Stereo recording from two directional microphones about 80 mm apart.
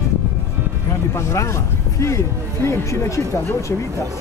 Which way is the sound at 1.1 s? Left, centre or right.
Left.